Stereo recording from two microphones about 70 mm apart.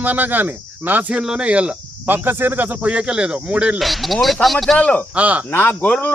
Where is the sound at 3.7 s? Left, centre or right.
Centre.